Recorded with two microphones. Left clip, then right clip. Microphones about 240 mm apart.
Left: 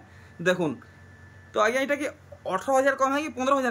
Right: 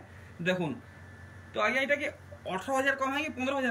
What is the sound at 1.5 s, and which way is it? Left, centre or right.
A man's voice, centre.